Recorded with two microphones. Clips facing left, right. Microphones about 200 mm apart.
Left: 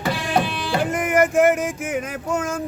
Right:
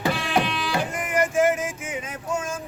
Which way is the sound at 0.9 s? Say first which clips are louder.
Left 7 dB; 75° left (ahead or behind).